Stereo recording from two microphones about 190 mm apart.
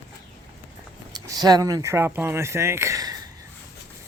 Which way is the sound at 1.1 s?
20° right (ahead or behind).